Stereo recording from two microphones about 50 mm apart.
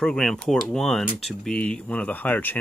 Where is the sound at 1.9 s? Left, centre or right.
Left.